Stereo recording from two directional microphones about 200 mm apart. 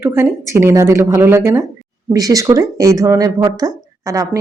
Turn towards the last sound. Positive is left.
turn(degrees=-15)  # may be behind; listen again after turning